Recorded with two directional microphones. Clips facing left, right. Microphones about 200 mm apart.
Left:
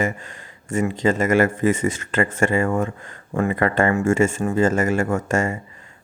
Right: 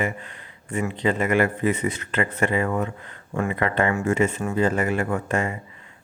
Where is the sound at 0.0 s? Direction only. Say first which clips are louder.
Left 3 dB; 45° left (ahead or behind).